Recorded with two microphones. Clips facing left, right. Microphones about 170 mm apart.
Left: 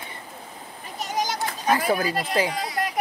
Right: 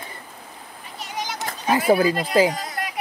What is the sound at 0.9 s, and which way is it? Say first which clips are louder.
Children playing: left 4 dB; 45° left (ahead or behind).